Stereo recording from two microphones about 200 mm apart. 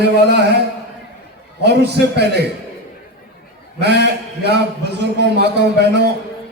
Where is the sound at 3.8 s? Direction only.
55° right (ahead or behind).